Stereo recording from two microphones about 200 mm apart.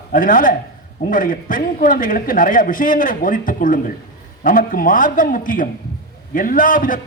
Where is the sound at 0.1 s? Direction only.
40° left (ahead or behind).